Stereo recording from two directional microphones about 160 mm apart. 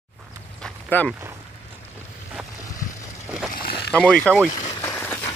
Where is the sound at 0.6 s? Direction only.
10° left (ahead or behind).